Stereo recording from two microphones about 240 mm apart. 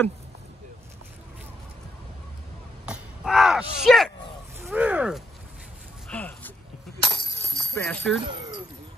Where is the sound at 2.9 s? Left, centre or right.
Centre.